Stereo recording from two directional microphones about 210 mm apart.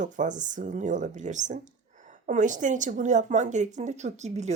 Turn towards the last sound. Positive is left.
turn(degrees=-35)  # may be behind; listen again after turning